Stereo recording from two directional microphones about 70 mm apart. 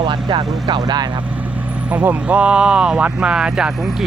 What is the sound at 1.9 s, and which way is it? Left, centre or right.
Speech, right.